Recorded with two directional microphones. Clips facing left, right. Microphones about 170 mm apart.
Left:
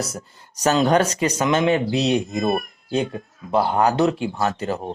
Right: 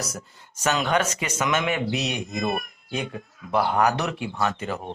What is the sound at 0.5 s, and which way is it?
Speech, 35° left (ahead or behind).